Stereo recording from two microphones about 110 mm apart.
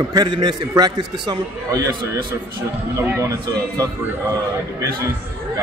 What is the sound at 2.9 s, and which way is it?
Speech, 25° right (ahead or behind).